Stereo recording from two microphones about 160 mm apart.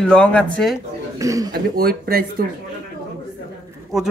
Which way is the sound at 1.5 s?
70° right (ahead or behind).